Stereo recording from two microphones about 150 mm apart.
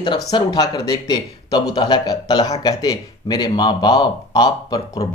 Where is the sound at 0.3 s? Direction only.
25° left (ahead or behind).